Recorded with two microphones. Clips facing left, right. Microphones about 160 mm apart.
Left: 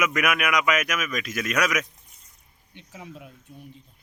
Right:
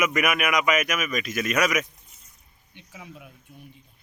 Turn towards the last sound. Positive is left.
turn(degrees=-5)  # may be behind; listen again after turning